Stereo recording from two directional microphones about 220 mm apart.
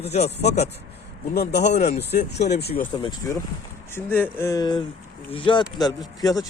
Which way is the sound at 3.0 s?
20° left (ahead or behind).